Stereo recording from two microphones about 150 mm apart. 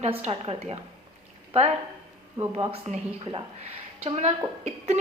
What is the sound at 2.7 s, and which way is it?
Speech, 40° right (ahead or behind).